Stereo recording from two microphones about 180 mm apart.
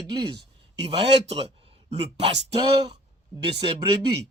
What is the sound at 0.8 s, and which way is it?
Speech, 30° right (ahead or behind).